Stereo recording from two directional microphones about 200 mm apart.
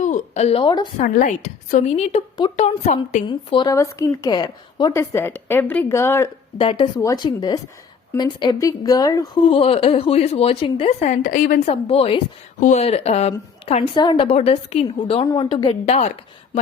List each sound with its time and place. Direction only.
0.0 s a woman's voice: 35° left (ahead or behind)
0.9 s a woman's voice: 40° left (ahead or behind)
3.2 s a woman's voice: 25° left (ahead or behind)
6.6 s a woman's voice: 25° left (ahead or behind)